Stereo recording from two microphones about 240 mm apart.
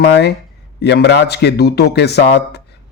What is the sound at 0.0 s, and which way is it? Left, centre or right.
Speech, left.